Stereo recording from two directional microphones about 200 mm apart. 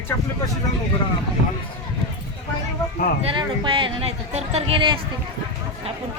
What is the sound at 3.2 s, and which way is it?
Speech, 25° right (ahead or behind).